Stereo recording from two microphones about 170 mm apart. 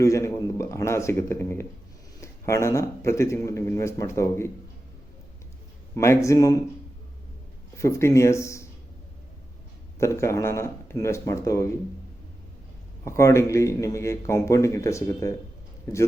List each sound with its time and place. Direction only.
0.0 s speech: 15° left (ahead or behind)
6.2 s speech: 20° left (ahead or behind)
7.8 s speech: 15° left (ahead or behind)
10.0 s speech: 15° left (ahead or behind)
13.1 s speech: 15° left (ahead or behind)